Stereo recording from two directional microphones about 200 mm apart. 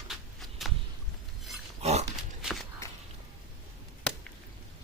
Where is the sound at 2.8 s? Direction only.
15° left (ahead or behind).